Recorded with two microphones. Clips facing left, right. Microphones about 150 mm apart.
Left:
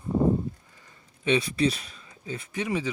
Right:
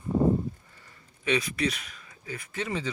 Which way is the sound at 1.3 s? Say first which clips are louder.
Left 4 dB; 30° left (ahead or behind).